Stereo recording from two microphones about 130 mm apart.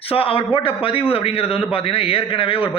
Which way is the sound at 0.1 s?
45° left (ahead or behind).